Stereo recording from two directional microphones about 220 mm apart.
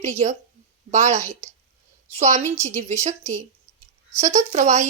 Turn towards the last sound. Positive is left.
turn(degrees=-30)  # may be behind; listen again after turning